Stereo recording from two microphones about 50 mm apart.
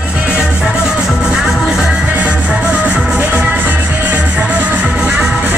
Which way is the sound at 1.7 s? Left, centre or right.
Centre.